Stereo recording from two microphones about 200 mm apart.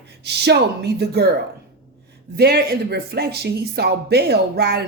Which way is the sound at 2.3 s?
55° right (ahead or behind).